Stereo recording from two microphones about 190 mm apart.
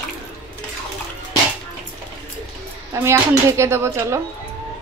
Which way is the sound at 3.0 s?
15° right (ahead or behind).